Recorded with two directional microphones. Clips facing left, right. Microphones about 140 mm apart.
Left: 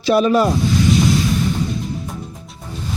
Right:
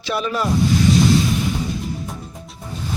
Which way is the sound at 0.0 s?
40° left (ahead or behind).